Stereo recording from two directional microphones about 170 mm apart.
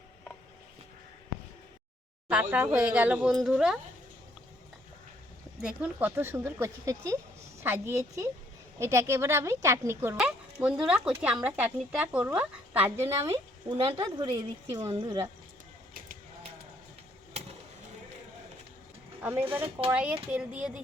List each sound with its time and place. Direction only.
2.3 s speech: 10° right (ahead or behind)
5.6 s speech: 5° right (ahead or behind)
13.7 s a woman's voice: 35° right (ahead or behind)
19.2 s speech: 10° right (ahead or behind)